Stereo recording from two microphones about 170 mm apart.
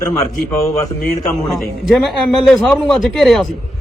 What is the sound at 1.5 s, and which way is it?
Speech, centre (ahead or behind).